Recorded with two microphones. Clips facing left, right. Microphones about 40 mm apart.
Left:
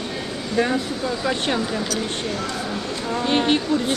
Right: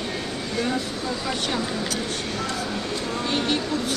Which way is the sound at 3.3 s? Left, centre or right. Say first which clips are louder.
Left 6 dB; left.